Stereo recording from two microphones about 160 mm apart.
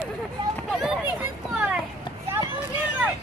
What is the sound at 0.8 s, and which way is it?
Children playing, 5° right (ahead or behind).